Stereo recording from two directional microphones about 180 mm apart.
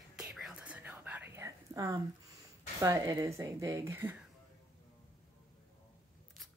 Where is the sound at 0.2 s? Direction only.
5° right (ahead or behind).